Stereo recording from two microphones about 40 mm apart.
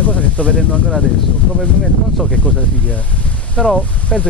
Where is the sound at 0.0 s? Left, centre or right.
Left.